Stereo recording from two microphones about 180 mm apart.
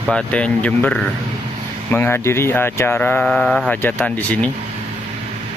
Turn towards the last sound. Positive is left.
turn(degrees=10)  # may be behind; listen again after turning